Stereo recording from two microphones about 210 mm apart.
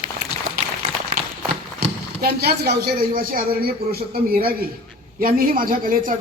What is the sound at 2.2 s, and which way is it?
A man's voice, 50° right (ahead or behind).